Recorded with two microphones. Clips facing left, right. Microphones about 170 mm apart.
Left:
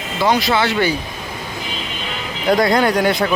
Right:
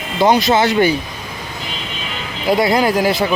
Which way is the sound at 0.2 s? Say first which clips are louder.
Right 4 dB; 20° right (ahead or behind).